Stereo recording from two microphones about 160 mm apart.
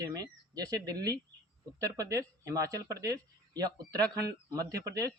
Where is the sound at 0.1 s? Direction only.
25° right (ahead or behind).